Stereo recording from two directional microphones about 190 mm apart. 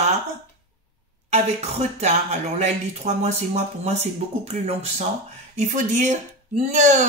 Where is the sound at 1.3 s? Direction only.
35° right (ahead or behind).